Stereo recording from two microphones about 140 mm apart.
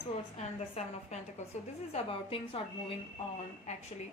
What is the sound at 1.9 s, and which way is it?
A woman's voice, 40° left (ahead or behind).